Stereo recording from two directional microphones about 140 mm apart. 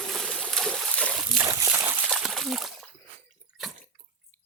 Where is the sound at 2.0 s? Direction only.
5° right (ahead or behind).